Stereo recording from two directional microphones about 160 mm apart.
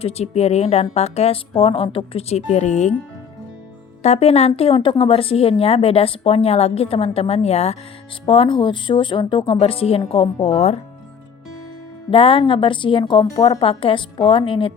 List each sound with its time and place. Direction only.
0.0 s a woman's voice: 40° left (ahead or behind)
4.0 s a woman's voice: 40° left (ahead or behind)
12.1 s a woman's voice: 35° left (ahead or behind)